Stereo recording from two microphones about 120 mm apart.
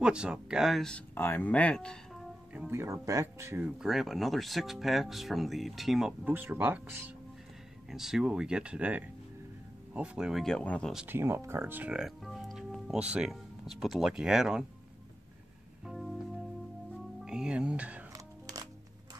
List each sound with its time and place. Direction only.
0.0 s speech: 10° right (ahead or behind)
1.1 s speech: 15° left (ahead or behind)
2.7 s speech: 20° right (ahead or behind)
3.7 s speech: 5° right (ahead or behind)
6.3 s speech: 15° right (ahead or behind)
7.9 s speech: 5° right (ahead or behind)
11.1 s speech: 20° right (ahead or behind); by 14.7 s 5° right (ahead or behind)
15.8 s music: centre (ahead or behind)
17.2 s speech: 5° right (ahead or behind)
18.1 s music: 35° right (ahead or behind)